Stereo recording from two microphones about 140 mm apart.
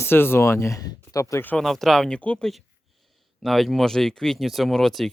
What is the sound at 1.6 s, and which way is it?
Speech, centre (ahead or behind).